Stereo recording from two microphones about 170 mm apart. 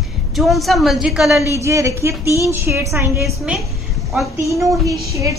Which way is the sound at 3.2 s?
Centre (ahead or behind).